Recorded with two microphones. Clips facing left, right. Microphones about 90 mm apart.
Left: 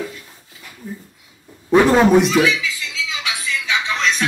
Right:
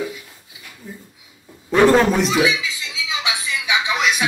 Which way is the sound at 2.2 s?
15° right (ahead or behind).